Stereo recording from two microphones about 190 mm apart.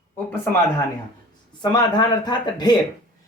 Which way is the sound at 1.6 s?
20° left (ahead or behind).